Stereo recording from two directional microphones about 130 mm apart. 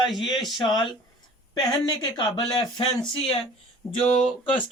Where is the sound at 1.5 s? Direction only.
35° left (ahead or behind).